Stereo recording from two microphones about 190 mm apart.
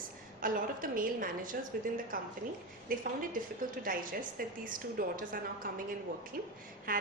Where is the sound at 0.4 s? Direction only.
45° right (ahead or behind).